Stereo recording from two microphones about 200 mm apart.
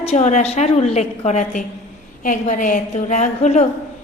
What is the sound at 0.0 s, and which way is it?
A woman's voice, 35° left (ahead or behind).